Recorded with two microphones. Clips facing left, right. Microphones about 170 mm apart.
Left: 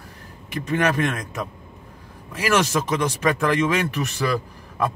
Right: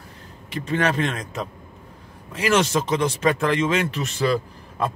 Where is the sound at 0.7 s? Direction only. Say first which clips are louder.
Left 1 dB; 25° right (ahead or behind).